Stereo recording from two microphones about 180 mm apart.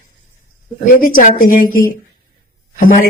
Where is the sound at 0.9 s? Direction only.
50° left (ahead or behind).